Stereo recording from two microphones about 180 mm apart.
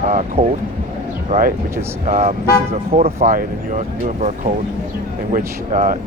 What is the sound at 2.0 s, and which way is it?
Speech, 40° right (ahead or behind).